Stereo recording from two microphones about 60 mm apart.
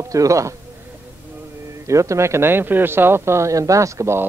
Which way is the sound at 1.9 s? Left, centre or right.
Right.